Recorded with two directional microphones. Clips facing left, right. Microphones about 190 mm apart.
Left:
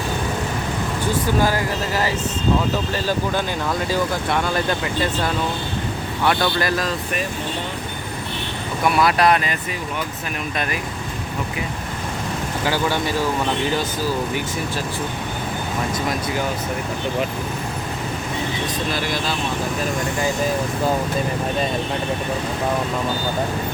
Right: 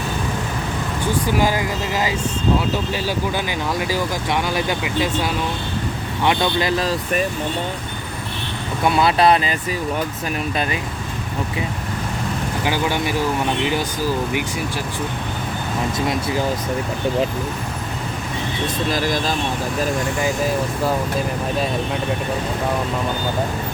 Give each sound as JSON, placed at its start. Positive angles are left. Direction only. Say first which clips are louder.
{"t": 1.4, "sound": "speech", "louder": "even", "side_deg": -15}
{"t": 9.0, "sound": "speech", "louder": "right 2 dB", "side_deg": -25}
{"t": 12.6, "sound": "speech", "louder": "even", "side_deg": -15}
{"t": 18.9, "sound": "speech", "louder": "right 3 dB", "side_deg": -45}